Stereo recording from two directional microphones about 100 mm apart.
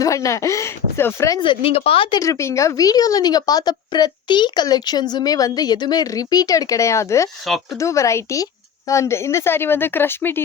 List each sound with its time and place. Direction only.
0.0 s a woman's voice: 35° left (ahead or behind)
1.4 s a woman's voice: 65° left (ahead or behind)
2.1 s a woman's voice: 35° left (ahead or behind)
7.4 s speech: centre (ahead or behind)
7.8 s a woman's voice: 30° left (ahead or behind)